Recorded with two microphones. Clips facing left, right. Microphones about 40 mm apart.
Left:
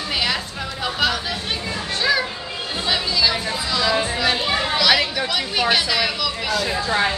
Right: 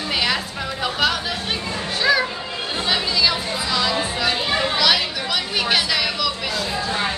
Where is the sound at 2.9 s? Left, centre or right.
Centre.